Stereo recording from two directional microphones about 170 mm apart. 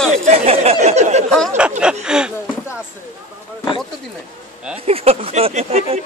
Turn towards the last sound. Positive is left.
turn(degrees=-35)  # may be behind; listen again after turning